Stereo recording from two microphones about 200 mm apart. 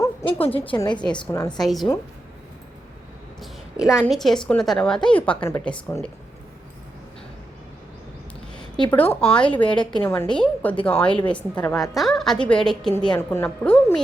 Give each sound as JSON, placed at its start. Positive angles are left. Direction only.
{"t": 0.0, "sound": "a sound", "side_deg": 10}
{"t": 0.4, "sound": "a woman's voice", "side_deg": 30}
{"t": 1.1, "sound": "speech", "side_deg": 15}
{"t": 1.5, "sound": "a woman's voice", "side_deg": 0}
{"t": 3.4, "sound": "a sound", "side_deg": -5}
{"t": 4.0, "sound": "a woman's voice", "side_deg": 0}
{"t": 8.9, "sound": "a woman's voice", "side_deg": 10}